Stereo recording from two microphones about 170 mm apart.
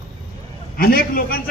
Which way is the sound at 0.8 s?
60° left (ahead or behind).